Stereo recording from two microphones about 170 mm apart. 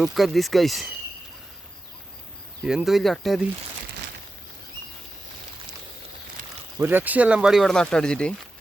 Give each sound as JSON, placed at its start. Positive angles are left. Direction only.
{"t": 0.0, "sound": "speech", "side_deg": 0}
{"t": 2.6, "sound": "speech", "side_deg": 0}
{"t": 6.7, "sound": "speech", "side_deg": -10}